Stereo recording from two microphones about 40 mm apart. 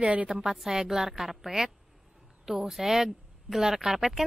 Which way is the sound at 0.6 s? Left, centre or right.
Centre.